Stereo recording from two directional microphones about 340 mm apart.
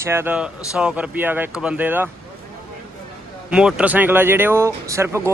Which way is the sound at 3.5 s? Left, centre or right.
Centre.